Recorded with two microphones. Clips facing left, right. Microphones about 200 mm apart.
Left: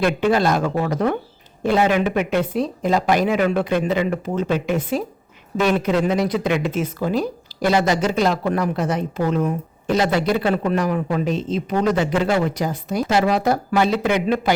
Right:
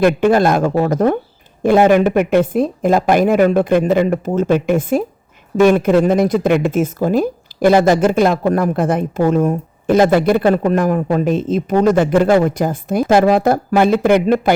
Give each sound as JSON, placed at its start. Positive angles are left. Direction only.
{"t": 0.0, "sound": "speech", "side_deg": -50}